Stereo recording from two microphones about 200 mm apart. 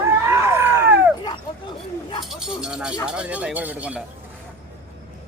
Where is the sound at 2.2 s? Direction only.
Centre (ahead or behind).